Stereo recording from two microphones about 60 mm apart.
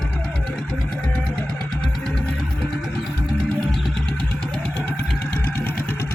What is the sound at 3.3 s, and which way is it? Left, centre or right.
Music, centre.